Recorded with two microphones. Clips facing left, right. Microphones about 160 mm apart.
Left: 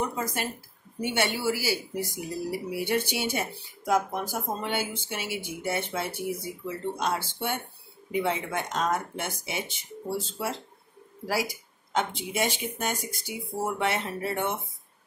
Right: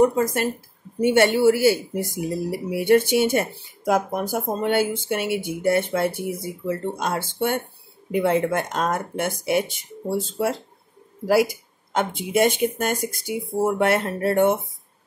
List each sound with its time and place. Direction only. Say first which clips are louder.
0.0 s speech: right 12 dB; 50° right (ahead or behind)
11.9 s speech: right 7 dB; 50° right (ahead or behind)